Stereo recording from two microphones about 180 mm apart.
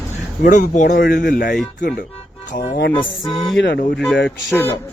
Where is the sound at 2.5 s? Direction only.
50° left (ahead or behind).